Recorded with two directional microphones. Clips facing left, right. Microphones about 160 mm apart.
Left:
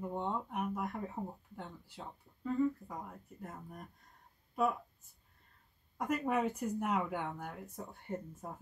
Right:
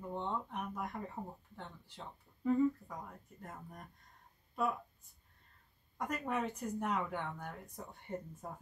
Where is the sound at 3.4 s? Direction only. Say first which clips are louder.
Left 2 dB; 5° left (ahead or behind).